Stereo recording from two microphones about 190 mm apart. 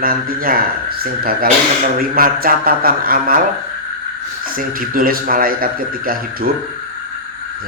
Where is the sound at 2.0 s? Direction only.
50° right (ahead or behind).